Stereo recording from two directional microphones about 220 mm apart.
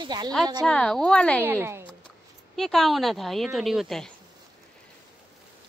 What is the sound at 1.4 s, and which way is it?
Speech, 10° right (ahead or behind).